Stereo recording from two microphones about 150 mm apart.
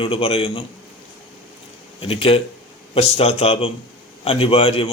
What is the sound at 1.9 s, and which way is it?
A man's voice, 40° left (ahead or behind).